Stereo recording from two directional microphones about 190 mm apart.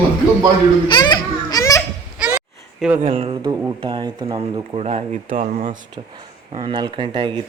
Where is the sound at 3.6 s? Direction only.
20° right (ahead or behind).